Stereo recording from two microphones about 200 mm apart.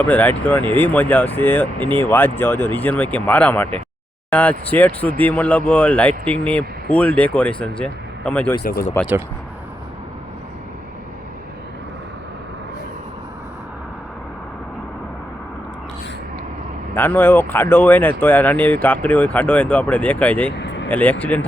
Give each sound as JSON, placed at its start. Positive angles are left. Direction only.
{"t": 0.0, "sound": "speech", "side_deg": 10}
{"t": 8.6, "sound": "speech", "side_deg": 45}
{"t": 16.9, "sound": "speech", "side_deg": 10}
{"t": 20.6, "sound": "vehicle", "side_deg": 60}
{"t": 20.9, "sound": "speech", "side_deg": 10}